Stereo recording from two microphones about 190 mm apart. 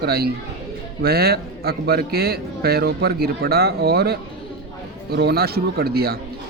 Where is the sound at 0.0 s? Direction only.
55° right (ahead or behind).